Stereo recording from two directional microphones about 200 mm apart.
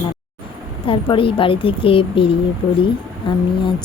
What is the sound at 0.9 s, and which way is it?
Speech, 25° left (ahead or behind).